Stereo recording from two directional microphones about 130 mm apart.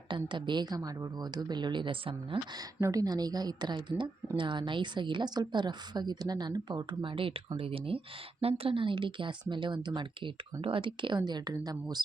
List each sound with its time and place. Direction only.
0.1 s a woman's voice: 40° right (ahead or behind)
2.8 s a woman's voice: 30° right (ahead or behind)